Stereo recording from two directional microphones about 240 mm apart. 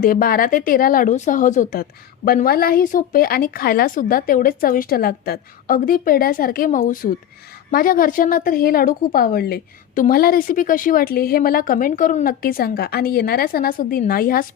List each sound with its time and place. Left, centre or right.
0.0 s speech: left